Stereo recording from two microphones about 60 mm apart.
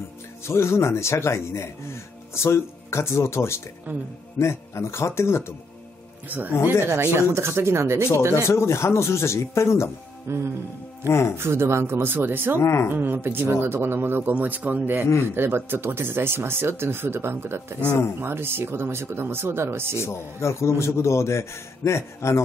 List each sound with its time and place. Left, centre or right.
0.4 s a man's voice: left
3.9 s speech: right
4.4 s a man's voice: left
6.2 s speech: right
6.5 s a man's voice: left
7.0 s speech: right
8.3 s a man's voice: left
10.2 s speech: right
11.1 s a man's voice: left
11.3 s speech: right
12.5 s a man's voice: left
12.9 s speech: right
20.0 s a man's voice: left